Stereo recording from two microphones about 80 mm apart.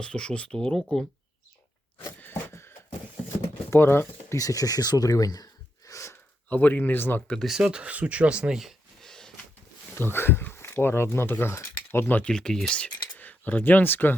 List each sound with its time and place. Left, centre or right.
0.0 s speech: centre
2.2 s a sound: left
3.7 s speech: left
4.4 s speech: left
6.5 s speech: left
7.4 s speech: centre
9.9 s speech: left
12.2 s speech: centre; by 14.2 s left